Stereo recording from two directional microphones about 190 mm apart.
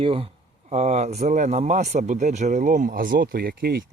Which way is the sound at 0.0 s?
30° right (ahead or behind).